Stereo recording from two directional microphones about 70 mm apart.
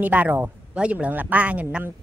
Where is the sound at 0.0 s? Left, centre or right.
Right.